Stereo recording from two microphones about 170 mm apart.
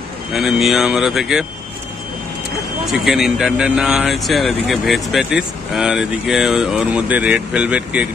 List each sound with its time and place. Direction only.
0.3 s speech: centre (ahead or behind)
2.9 s speech: centre (ahead or behind)